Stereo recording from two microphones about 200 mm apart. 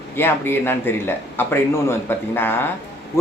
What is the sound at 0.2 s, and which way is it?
A man's voice, 10° left (ahead or behind).